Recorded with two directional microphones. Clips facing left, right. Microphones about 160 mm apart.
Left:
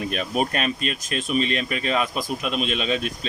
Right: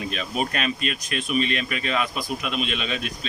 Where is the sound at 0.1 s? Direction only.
45° left (ahead or behind).